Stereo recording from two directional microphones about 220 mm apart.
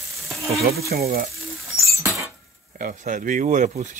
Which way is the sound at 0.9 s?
45° right (ahead or behind).